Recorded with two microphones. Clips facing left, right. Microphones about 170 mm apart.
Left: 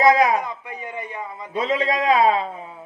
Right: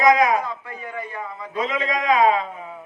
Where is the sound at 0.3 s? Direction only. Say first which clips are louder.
Even; 20° left (ahead or behind).